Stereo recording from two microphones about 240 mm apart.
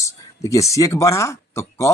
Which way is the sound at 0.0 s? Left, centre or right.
Centre.